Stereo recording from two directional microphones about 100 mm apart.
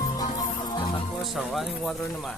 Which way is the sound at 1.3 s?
Centre (ahead or behind).